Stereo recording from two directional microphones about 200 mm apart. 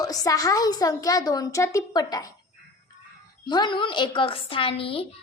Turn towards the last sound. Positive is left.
turn(degrees=30)  # may be behind; listen again after turning